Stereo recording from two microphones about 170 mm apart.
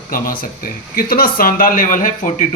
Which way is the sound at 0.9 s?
60° left (ahead or behind).